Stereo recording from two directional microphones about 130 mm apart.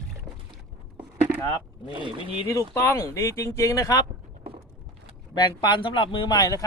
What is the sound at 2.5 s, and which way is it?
Speech, 20° left (ahead or behind).